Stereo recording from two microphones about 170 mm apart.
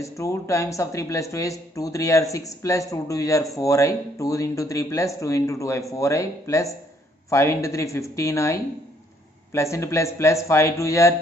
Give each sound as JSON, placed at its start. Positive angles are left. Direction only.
{"t": 0.0, "sound": "a man's voice", "side_deg": 20}